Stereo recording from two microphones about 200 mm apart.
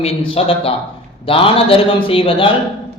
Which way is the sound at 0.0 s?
30° left (ahead or behind).